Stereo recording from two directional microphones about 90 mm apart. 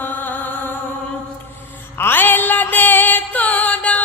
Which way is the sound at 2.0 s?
20° left (ahead or behind).